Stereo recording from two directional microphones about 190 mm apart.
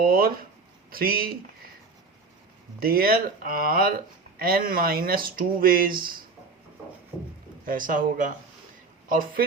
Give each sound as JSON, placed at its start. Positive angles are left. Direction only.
{"t": 0.0, "sound": "speech", "side_deg": -50}
{"t": 2.8, "sound": "speech", "side_deg": -50}
{"t": 7.1, "sound": "speech", "side_deg": -10}
{"t": 7.6, "sound": "speech", "side_deg": -45}